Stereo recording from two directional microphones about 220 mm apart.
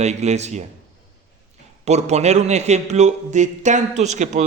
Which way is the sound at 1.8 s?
30° right (ahead or behind).